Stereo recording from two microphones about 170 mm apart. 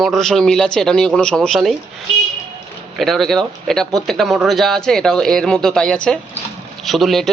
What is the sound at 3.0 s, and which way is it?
A man's voice, centre (ahead or behind).